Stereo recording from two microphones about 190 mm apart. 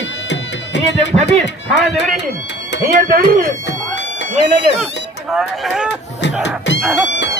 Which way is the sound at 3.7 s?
70° left (ahead or behind).